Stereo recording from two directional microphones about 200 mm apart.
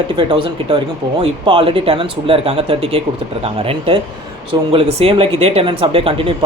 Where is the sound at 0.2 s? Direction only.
25° right (ahead or behind).